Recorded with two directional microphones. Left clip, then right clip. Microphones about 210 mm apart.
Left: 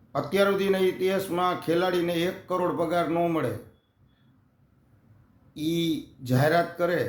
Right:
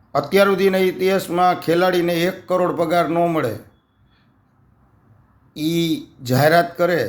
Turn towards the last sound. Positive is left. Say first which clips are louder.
# right 8 dB
turn(degrees=-30)  # may be behind; listen again after turning